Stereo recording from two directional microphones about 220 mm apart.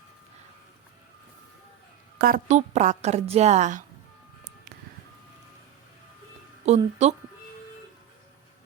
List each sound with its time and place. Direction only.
2.1 s a woman's voice: 40° right (ahead or behind)
6.7 s speech: 30° right (ahead or behind)